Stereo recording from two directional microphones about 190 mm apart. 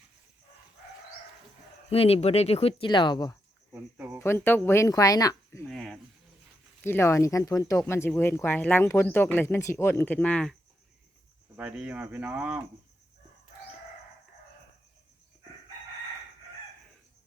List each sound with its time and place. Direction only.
1.9 s speech: 30° left (ahead or behind)
3.9 s a sound: 10° right (ahead or behind)
4.2 s speech: 10° left (ahead or behind)
5.6 s cricket: centre (ahead or behind)
6.8 s speech: 15° left (ahead or behind)
11.5 s speech: 5° right (ahead or behind)